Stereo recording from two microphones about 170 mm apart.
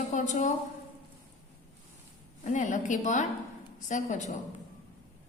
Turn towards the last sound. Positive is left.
turn(degrees=45)  # may be behind; listen again after turning